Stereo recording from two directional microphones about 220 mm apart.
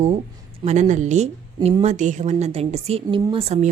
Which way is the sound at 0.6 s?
30° right (ahead or behind).